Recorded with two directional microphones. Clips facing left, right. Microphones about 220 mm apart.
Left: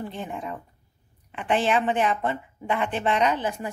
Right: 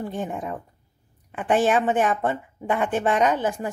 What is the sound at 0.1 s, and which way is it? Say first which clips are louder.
Speech: right 4 dB; 45° right (ahead or behind).